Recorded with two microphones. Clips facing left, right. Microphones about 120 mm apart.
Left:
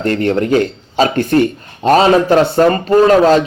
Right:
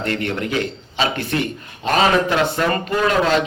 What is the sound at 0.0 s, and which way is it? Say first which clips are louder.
Speech: left 8 dB; 40° left (ahead or behind).